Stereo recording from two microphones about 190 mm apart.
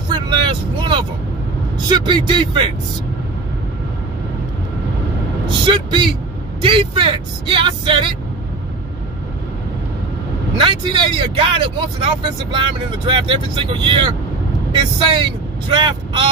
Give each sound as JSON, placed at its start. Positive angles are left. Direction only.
{"t": 0.1, "sound": "vehicle", "side_deg": -25}
{"t": 1.9, "sound": "speech", "side_deg": -25}
{"t": 5.7, "sound": "speech", "side_deg": -25}
{"t": 10.6, "sound": "speech", "side_deg": -25}